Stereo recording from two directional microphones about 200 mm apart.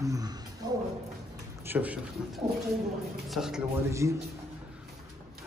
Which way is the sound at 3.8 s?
15° right (ahead or behind).